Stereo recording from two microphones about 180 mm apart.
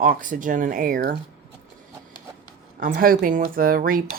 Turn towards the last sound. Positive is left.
turn(degrees=-50)  # may be behind; listen again after turning